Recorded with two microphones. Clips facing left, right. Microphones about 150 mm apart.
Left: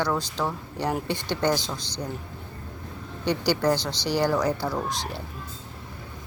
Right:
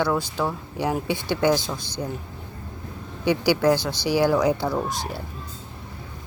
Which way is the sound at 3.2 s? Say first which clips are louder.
Right 4 dB; 10° right (ahead or behind).